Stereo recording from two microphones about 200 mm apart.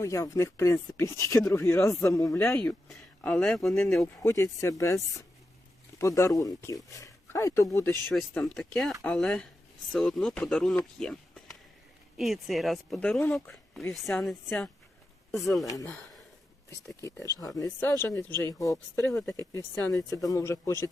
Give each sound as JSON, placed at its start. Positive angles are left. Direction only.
{"t": 0.0, "sound": "speech", "side_deg": 15}
{"t": 2.6, "sound": "speech", "side_deg": 5}
{"t": 8.1, "sound": "speech", "side_deg": 5}
{"t": 15.6, "sound": "speech", "side_deg": 15}